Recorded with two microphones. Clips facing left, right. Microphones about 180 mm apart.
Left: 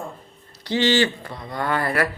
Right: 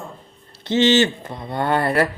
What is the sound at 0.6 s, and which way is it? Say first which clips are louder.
Speech: right 4 dB; 20° right (ahead or behind).